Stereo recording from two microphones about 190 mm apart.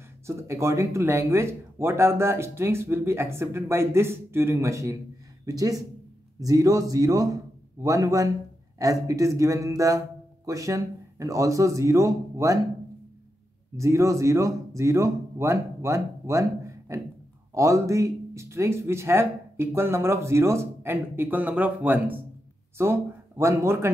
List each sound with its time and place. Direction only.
0.3 s a man's voice: 15° right (ahead or behind)
13.7 s speech: 15° right (ahead or behind)